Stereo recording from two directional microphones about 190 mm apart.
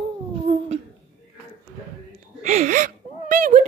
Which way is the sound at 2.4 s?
40° right (ahead or behind).